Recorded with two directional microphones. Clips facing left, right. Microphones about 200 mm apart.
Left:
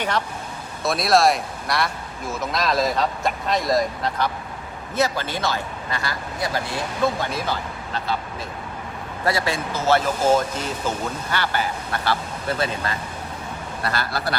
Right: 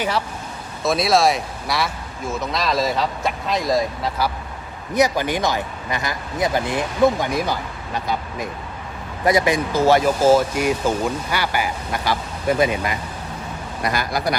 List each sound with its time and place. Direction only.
0.8 s speech: centre (ahead or behind)
4.9 s speech: 15° right (ahead or behind)